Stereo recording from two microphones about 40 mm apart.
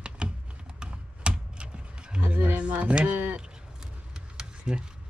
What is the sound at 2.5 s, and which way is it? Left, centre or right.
Speech, right.